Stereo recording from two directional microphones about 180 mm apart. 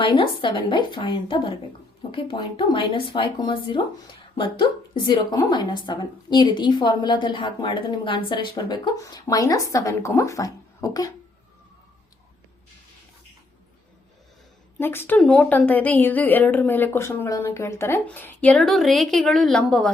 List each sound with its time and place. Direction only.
0.0 s a woman's voice: 25° left (ahead or behind)
14.8 s a woman's voice: 10° left (ahead or behind)